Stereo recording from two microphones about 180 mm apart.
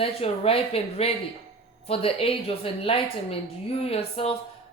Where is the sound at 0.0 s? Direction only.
30° left (ahead or behind).